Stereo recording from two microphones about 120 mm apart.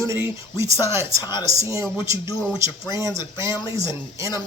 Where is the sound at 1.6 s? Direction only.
25° right (ahead or behind).